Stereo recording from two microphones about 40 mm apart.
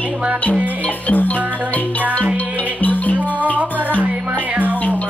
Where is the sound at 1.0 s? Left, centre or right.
Left.